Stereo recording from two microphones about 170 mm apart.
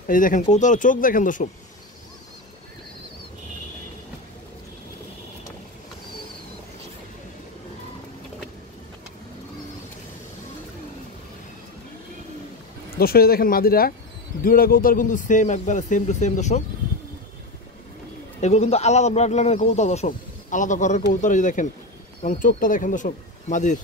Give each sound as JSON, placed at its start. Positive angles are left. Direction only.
{"t": 0.0, "sound": "speech", "side_deg": 50}
{"t": 12.9, "sound": "speech", "side_deg": 65}
{"t": 18.4, "sound": "speech", "side_deg": 40}